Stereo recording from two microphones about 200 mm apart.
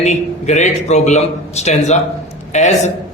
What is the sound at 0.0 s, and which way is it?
A man's voice, 35° left (ahead or behind).